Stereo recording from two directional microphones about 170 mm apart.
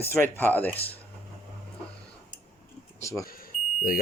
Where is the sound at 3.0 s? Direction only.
15° left (ahead or behind).